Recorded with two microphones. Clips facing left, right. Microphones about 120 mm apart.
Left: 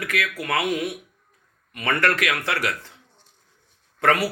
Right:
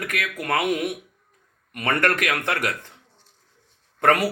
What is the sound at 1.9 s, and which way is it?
Speech, 45° right (ahead or behind).